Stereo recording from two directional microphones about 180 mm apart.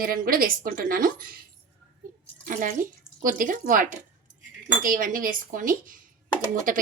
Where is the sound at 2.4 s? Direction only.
45° right (ahead or behind).